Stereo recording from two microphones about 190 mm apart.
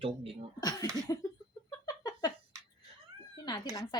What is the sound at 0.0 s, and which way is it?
Speech, 30° right (ahead or behind).